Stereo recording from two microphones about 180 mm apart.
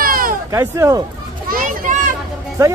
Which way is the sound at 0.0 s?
50° right (ahead or behind).